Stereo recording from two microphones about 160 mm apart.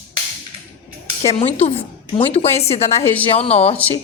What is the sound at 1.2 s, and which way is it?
A woman's voice, 40° left (ahead or behind).